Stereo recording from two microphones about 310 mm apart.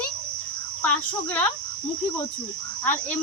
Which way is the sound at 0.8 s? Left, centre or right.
Centre.